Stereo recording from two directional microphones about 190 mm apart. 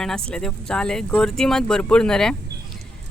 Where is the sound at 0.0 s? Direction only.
5° left (ahead or behind).